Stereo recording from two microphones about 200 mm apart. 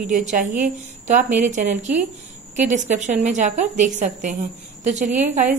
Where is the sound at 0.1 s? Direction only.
40° right (ahead or behind).